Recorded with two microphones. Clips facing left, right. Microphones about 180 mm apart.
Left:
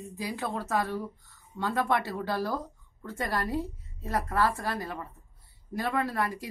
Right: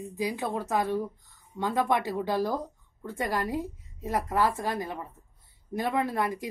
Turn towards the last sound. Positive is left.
turn(degrees=-20)  # may be behind; listen again after turning